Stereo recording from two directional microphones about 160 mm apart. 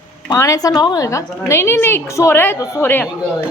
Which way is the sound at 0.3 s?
20° left (ahead or behind).